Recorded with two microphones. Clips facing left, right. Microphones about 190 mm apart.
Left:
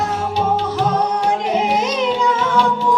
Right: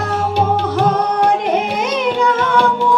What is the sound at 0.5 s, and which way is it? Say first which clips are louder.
Music: right 2 dB; 60° right (ahead or behind).